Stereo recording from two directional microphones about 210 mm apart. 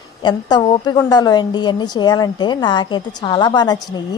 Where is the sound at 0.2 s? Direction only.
20° left (ahead or behind).